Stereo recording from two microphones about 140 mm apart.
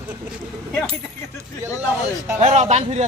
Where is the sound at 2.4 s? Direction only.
55° right (ahead or behind).